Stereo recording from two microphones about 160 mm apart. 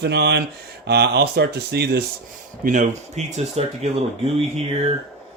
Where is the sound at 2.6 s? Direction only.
50° right (ahead or behind).